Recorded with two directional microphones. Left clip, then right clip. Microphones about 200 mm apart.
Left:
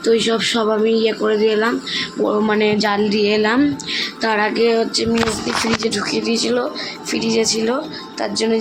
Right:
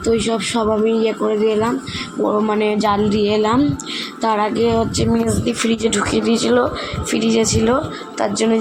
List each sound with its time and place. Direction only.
0.0 s speech: 5° right (ahead or behind); by 8.5 s 20° right (ahead or behind)